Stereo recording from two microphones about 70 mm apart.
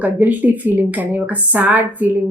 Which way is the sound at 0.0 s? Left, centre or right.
Right.